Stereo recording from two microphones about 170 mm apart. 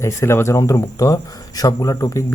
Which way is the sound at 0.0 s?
15° left (ahead or behind).